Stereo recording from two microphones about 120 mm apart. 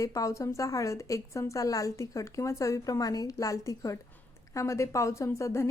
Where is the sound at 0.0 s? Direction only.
30° left (ahead or behind).